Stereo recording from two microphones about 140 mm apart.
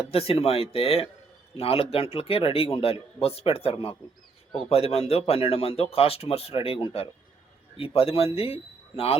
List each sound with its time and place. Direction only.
0.1 s speech: 45° left (ahead or behind)